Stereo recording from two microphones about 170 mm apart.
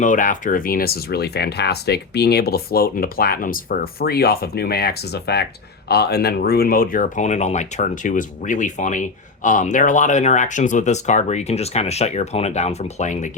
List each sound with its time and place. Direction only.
0.0 s speech: 50° left (ahead or behind)